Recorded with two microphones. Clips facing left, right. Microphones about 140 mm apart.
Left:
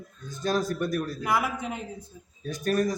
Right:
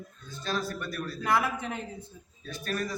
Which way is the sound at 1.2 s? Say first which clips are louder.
Right 4 dB; 10° left (ahead or behind).